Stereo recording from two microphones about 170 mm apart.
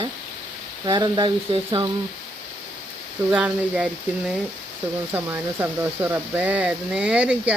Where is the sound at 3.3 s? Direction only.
5° right (ahead or behind).